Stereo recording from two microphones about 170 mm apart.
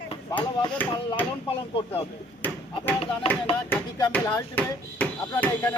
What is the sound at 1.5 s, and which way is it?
Speech, 35° left (ahead or behind).